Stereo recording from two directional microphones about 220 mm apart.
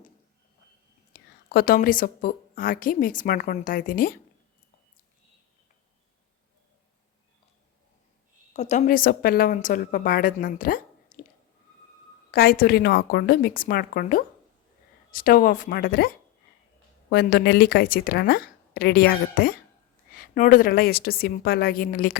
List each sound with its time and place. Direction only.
1.1 s whispering: 45° left (ahead or behind)
1.5 s a woman's voice: 40° left (ahead or behind)
8.5 s a woman's voice: 30° left (ahead or behind)
12.3 s a woman's voice: 40° left (ahead or behind)